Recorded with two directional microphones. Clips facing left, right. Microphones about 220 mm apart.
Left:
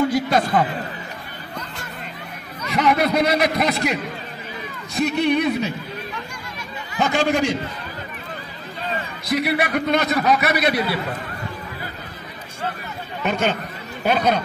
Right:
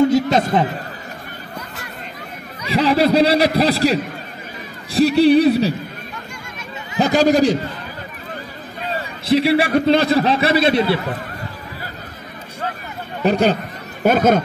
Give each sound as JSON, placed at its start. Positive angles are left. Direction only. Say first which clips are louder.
{"t": 0.0, "sound": "chatter", "louder": "right 4 dB", "side_deg": -25}
{"t": 2.7, "sound": "a man's voice", "louder": "right 4 dB", "side_deg": -30}
{"t": 7.0, "sound": "a man's voice", "louder": "right 6 dB", "side_deg": -35}
{"t": 8.9, "sound": "a man's voice", "louder": "right 7 dB", "side_deg": -30}
{"t": 13.2, "sound": "a man's voice", "louder": "right 6 dB", "side_deg": -35}
{"t": 14.0, "sound": "speech", "louder": "right 6 dB", "side_deg": -45}